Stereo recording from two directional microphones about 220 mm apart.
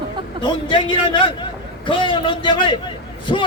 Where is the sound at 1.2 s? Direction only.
25° left (ahead or behind).